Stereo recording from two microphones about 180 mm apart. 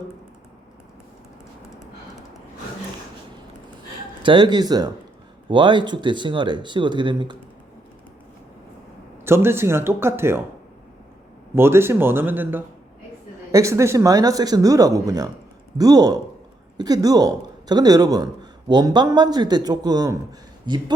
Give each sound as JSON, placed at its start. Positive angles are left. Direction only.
{"t": 4.2, "sound": "speech", "side_deg": -25}
{"t": 9.2, "sound": "speech", "side_deg": -15}
{"t": 11.5, "sound": "a man's voice", "side_deg": -15}